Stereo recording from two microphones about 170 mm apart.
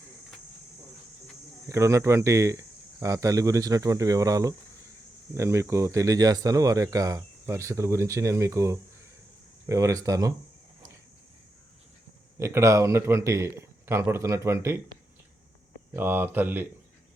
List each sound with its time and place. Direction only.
1.6 s speech: 15° right (ahead or behind)
12.4 s speech: 15° right (ahead or behind)
15.9 s speech: 10° right (ahead or behind)